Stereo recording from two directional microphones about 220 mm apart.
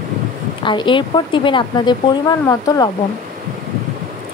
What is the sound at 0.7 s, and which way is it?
Speech, 20° left (ahead or behind).